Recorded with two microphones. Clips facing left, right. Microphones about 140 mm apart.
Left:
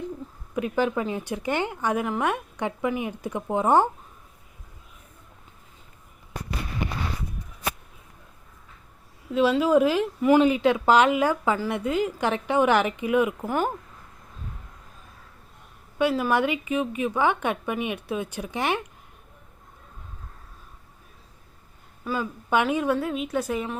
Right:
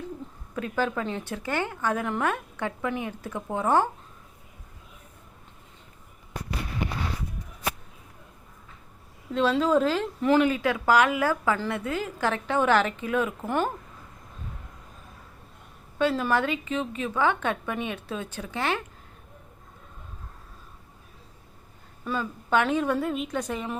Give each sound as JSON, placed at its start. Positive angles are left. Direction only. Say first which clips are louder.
{"t": 0.5, "sound": "a woman's voice", "louder": "left 3 dB", "side_deg": 15}
{"t": 2.3, "sound": "a woman's voice", "louder": "left 2 dB", "side_deg": 15}
{"t": 9.3, "sound": "a woman's voice", "louder": "left 3 dB", "side_deg": 10}
{"t": 13.4, "sound": "a woman's voice", "louder": "left 1 dB", "side_deg": 5}
{"t": 16.0, "sound": "a woman's voice", "louder": "left 2 dB", "side_deg": 10}
{"t": 22.0, "sound": "a woman's voice", "louder": "left 2 dB", "side_deg": 5}